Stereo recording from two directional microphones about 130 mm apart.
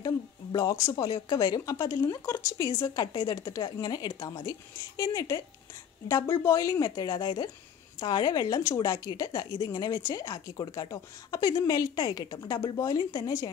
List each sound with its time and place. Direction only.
0.0 s speech: 25° left (ahead or behind)